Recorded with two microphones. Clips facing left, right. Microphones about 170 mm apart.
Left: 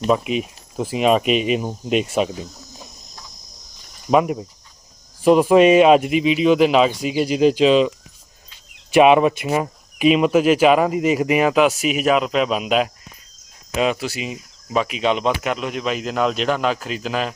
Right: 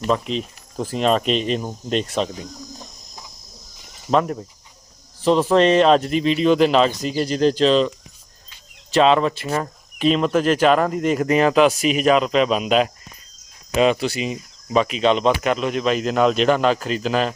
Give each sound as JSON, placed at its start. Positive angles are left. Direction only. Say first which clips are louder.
{"t": 0.1, "sound": "speech", "louder": "left 2 dB", "side_deg": 10}
{"t": 4.1, "sound": "speech", "louder": "left 2 dB", "side_deg": 10}